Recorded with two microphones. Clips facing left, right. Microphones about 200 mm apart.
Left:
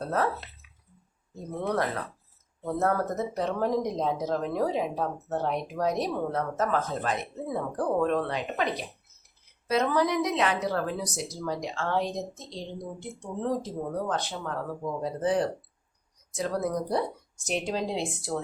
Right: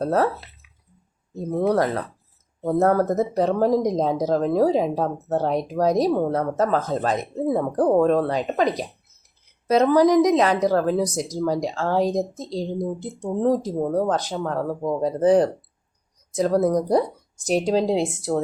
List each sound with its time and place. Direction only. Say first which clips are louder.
0.0 s speech: right 8 dB; 40° right (ahead or behind)
1.5 s speech: right 8 dB; 35° right (ahead or behind)